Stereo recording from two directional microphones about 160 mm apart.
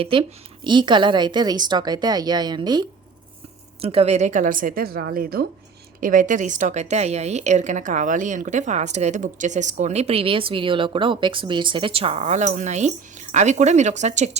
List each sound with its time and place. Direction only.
0.0 s a woman's voice: 30° right (ahead or behind)
3.8 s a woman's voice: 40° right (ahead or behind); by 5.5 s 70° right (ahead or behind)
6.0 s a woman's voice: 55° right (ahead or behind)